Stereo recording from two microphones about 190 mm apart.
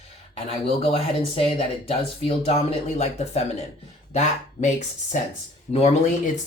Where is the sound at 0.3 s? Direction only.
30° left (ahead or behind).